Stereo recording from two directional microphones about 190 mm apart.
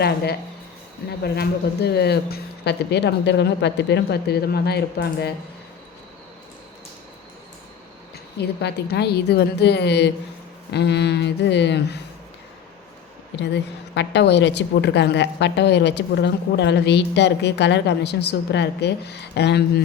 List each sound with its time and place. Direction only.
1.2 s a woman's voice: 60° left (ahead or behind)
8.4 s a woman's voice: 60° left (ahead or behind)
13.4 s a woman's voice: 65° left (ahead or behind)